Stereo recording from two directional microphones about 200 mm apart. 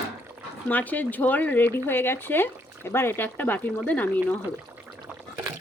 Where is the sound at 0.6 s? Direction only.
10° left (ahead or behind).